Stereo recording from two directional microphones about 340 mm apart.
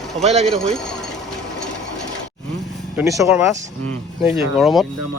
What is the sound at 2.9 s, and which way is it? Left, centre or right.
Speech, centre.